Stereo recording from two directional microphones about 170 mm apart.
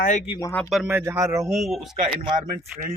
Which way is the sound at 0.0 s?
45° left (ahead or behind).